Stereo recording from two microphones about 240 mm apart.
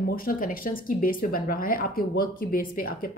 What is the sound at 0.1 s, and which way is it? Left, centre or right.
Speech, left.